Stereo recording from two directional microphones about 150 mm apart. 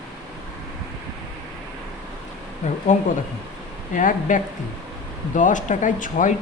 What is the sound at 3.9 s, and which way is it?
Speech, 60° left (ahead or behind).